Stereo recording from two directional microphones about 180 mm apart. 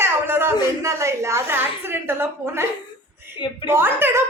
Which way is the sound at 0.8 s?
15° right (ahead or behind).